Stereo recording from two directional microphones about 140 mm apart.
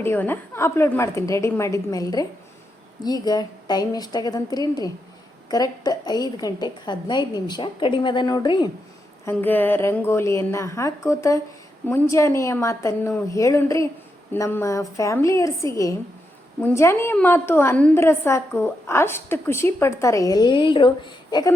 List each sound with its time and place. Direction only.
0.0 s a woman's voice: 15° left (ahead or behind); by 8.7 s 30° left (ahead or behind)
9.2 s a woman's voice: 15° left (ahead or behind); by 21.5 s 30° left (ahead or behind)